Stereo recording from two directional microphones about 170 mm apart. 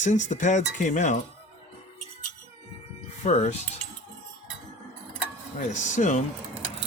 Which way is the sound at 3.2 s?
40° left (ahead or behind).